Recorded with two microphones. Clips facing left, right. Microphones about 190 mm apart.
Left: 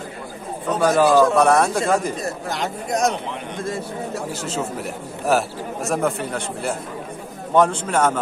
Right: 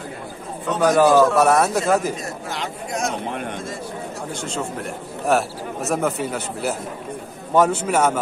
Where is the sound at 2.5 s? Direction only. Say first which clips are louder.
Left 4 dB; 40° left (ahead or behind).